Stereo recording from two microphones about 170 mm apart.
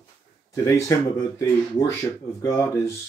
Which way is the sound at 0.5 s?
15° left (ahead or behind).